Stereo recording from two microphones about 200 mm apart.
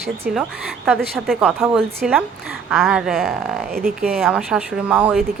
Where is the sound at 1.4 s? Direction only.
10° right (ahead or behind).